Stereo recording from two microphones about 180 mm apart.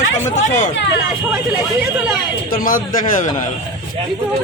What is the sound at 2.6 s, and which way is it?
Speech, 50° left (ahead or behind).